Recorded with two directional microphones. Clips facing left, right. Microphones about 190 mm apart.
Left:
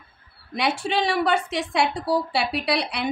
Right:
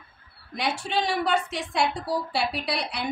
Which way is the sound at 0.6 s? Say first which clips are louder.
Left 4 dB; 75° left (ahead or behind).